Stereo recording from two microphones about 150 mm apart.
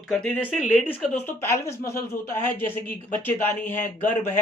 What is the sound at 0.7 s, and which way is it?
Speech, 10° left (ahead or behind).